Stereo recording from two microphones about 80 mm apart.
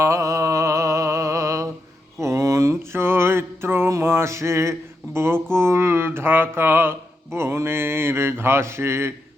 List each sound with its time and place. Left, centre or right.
0.0 s music: right
2.2 s a sound: right
5.1 s speech: right